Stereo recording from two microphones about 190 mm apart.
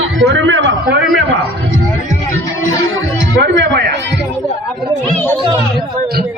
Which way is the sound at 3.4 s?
70° right (ahead or behind).